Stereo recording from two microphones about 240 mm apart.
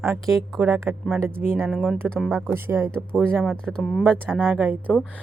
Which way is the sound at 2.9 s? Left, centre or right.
Centre.